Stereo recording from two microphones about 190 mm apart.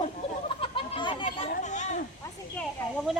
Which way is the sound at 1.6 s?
40° left (ahead or behind).